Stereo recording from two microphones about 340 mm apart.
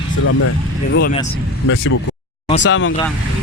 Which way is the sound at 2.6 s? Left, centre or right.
Left.